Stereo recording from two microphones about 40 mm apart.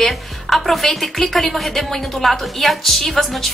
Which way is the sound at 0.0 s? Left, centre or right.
Centre.